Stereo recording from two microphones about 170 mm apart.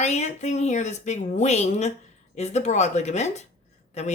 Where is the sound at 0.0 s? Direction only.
40° left (ahead or behind).